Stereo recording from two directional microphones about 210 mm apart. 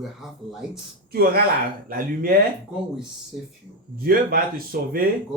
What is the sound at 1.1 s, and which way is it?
Speech, 45° right (ahead or behind).